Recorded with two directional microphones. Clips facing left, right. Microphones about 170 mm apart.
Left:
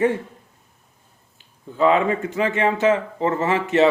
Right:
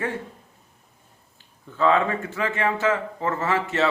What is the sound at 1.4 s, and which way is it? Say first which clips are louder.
A man's voice: left 4 dB; 15° left (ahead or behind).